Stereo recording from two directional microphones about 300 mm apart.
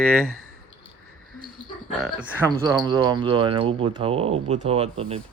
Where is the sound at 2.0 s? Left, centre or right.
Centre.